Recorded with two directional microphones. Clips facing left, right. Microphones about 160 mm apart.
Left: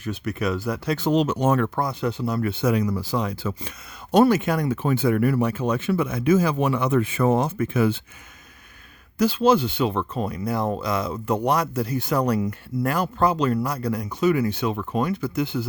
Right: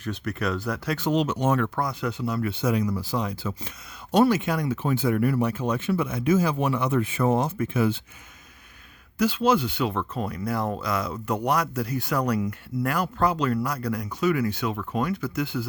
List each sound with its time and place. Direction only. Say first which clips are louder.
0.0 s speech: left 2 dB; 10° left (ahead or behind)
0.9 s speech: left 3 dB; 30° left (ahead or behind); by 3.8 s 80° left
4.1 s speech: left 3 dB; 50° left (ahead or behind); by 8.0 s 70° left (ahead or behind)
9.1 s speech: left 3 dB; 35° left (ahead or behind)